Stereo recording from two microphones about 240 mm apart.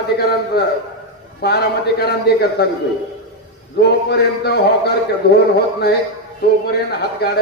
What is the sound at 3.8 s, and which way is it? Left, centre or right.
Speech, left.